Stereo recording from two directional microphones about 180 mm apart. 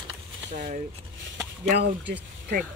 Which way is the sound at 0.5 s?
45° right (ahead or behind).